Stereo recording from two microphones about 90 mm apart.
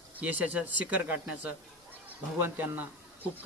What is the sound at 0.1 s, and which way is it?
Speech, 15° right (ahead or behind).